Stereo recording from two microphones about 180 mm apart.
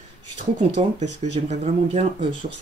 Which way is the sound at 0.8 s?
35° right (ahead or behind).